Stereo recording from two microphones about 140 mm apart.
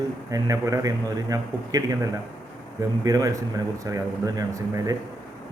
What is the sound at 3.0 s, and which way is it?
Speech, 25° right (ahead or behind).